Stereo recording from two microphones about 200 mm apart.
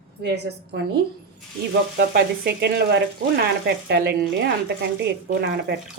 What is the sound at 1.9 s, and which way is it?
A woman's voice, 50° right (ahead or behind).